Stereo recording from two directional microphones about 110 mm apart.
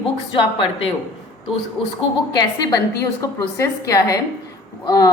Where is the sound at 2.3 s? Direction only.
35° left (ahead or behind).